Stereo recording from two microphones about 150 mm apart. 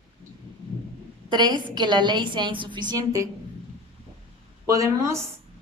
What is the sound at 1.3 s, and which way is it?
A woman's voice, 30° right (ahead or behind).